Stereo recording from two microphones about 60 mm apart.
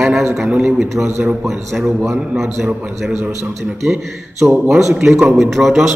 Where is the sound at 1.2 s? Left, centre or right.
Centre.